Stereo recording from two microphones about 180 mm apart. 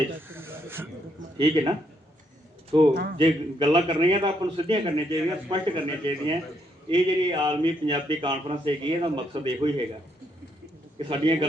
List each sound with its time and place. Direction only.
0.2 s snake: 10° right (ahead or behind)
1.4 s speech: 30° right (ahead or behind)
2.9 s a man's voice: 55° right (ahead or behind)
3.2 s a man's voice: 30° right (ahead or behind)
10.9 s a man's voice: 30° right (ahead or behind)